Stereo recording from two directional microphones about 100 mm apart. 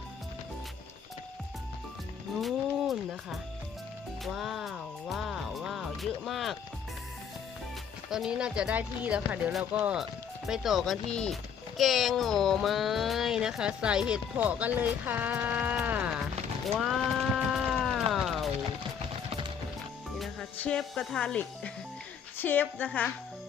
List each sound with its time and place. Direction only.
2.4 s speech: 5° right (ahead or behind)
8.1 s speech: 5° right (ahead or behind)
16.2 s a sound: centre (ahead or behind)
20.1 s music: centre (ahead or behind)
20.6 s speech: 10° left (ahead or behind)